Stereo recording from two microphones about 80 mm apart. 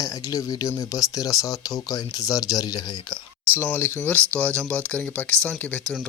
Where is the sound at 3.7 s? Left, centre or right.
Left.